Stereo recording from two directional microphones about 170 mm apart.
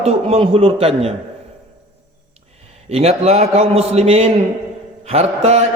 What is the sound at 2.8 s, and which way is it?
A man's voice, 35° right (ahead or behind).